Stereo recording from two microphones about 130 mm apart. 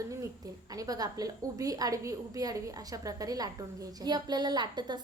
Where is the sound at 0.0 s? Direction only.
25° right (ahead or behind).